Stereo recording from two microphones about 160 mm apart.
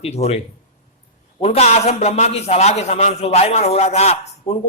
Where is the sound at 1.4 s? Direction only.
40° left (ahead or behind).